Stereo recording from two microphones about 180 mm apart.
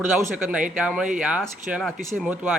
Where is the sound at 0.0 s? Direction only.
10° right (ahead or behind).